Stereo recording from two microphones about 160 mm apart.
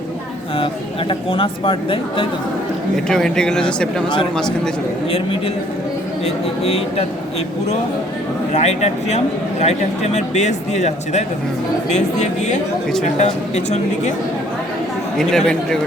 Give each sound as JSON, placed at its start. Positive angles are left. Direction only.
{"t": 0.5, "sound": "speech", "side_deg": 35}
{"t": 2.9, "sound": "speech", "side_deg": 5}
{"t": 6.2, "sound": "speech", "side_deg": 40}
{"t": 8.5, "sound": "a man's voice", "side_deg": 45}
{"t": 15.2, "sound": "speech", "side_deg": 5}